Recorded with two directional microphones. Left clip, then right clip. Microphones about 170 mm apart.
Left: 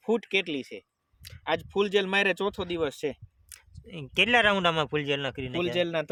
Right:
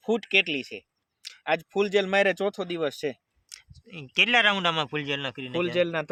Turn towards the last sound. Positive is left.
turn(degrees=-25)  # may be behind; listen again after turning